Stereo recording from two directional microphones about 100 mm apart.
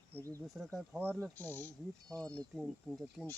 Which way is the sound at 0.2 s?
30° right (ahead or behind).